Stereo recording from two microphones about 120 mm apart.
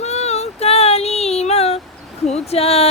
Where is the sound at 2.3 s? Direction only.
60° left (ahead or behind).